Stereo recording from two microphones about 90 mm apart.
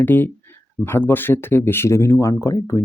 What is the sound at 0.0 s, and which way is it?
Speech, 20° left (ahead or behind).